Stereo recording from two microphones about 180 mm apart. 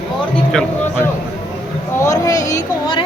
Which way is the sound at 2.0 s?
20° left (ahead or behind).